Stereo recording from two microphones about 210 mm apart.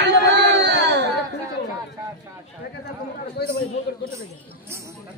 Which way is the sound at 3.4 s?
50° left (ahead or behind).